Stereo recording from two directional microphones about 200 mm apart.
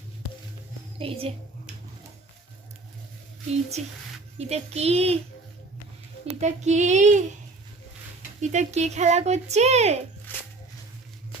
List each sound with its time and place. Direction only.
0.9 s a woman's voice: 30° right (ahead or behind)
3.8 s speech: 35° right (ahead or behind)
6.4 s speech: 35° right (ahead or behind)
8.4 s speech: 35° right (ahead or behind)
10.3 s music: 10° left (ahead or behind)